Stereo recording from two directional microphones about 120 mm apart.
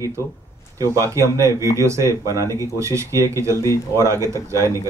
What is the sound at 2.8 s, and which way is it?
Speech, 25° right (ahead or behind).